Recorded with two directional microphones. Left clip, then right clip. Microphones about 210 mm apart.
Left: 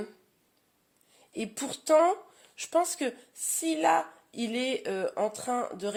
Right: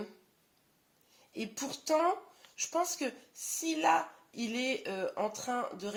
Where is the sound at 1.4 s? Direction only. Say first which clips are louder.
Left 4 dB; 50° left (ahead or behind).